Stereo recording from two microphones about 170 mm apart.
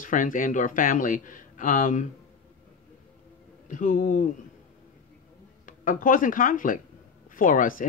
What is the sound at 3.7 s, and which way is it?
Speech, 50° left (ahead or behind).